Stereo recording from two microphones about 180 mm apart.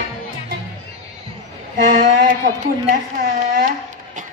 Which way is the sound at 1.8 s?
50° right (ahead or behind).